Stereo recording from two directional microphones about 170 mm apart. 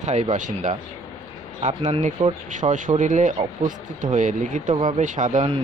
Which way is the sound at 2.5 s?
50° right (ahead or behind).